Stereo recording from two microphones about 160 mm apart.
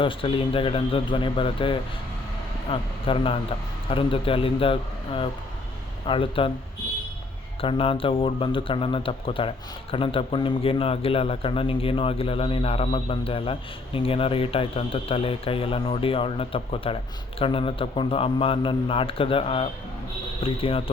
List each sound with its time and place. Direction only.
0.0 s a man's voice: 35° left (ahead or behind)
7.6 s a man's voice: 35° left (ahead or behind)